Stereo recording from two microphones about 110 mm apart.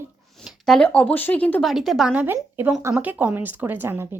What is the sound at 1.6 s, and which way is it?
Speech, centre (ahead or behind).